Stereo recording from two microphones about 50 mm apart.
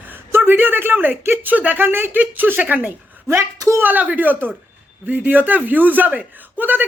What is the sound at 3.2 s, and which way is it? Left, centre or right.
Speech, right.